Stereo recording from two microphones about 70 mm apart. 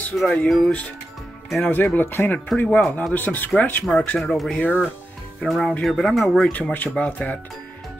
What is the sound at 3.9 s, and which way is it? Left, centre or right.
Speech, centre.